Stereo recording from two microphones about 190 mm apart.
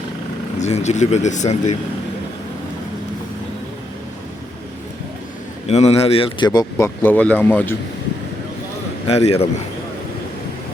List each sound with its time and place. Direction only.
0.6 s speech: 35° left (ahead or behind)
5.6 s speech: 35° left (ahead or behind); by 7.8 s 10° left (ahead or behind)
9.0 s speech: 35° left (ahead or behind)